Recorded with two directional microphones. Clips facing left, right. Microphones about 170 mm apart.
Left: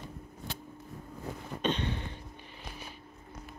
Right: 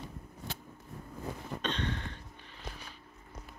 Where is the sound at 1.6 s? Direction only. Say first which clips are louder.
Left 5 dB; 10° left (ahead or behind).